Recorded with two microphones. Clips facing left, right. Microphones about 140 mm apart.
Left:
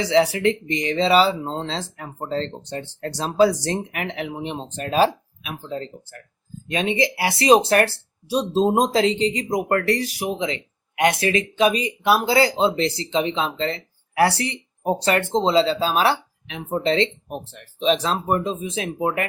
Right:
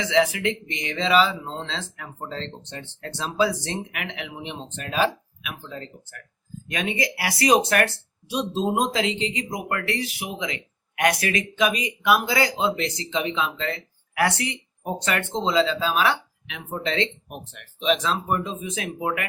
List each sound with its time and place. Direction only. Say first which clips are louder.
0.0 s speech: left 3 dB; 35° left (ahead or behind)